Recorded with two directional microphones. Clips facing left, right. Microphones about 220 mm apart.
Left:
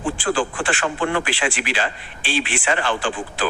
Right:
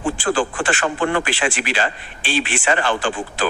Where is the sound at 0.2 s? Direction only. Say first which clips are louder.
Right 2 dB; 40° right (ahead or behind).